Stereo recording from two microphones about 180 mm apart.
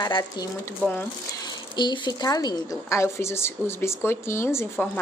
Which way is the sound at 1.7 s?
25° left (ahead or behind).